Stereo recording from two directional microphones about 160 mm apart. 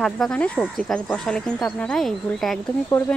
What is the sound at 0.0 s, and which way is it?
Speech, 5° left (ahead or behind).